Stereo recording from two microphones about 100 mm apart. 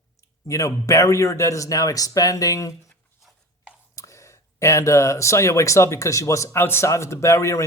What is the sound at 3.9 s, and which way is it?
Speech, 30° left (ahead or behind).